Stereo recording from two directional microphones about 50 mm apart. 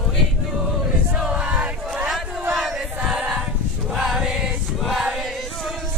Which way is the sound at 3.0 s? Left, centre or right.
Centre.